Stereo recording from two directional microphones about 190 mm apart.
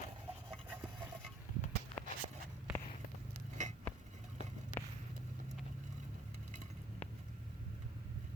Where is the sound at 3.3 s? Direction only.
40° right (ahead or behind).